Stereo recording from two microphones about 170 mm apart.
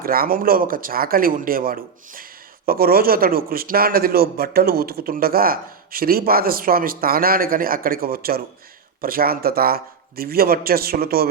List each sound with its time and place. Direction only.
0.0 s a man's voice: 60° right (ahead or behind)